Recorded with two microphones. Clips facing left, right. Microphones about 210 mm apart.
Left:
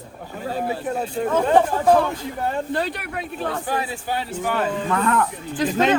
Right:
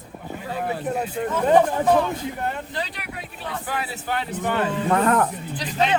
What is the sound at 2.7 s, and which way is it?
Speech, 55° left (ahead or behind).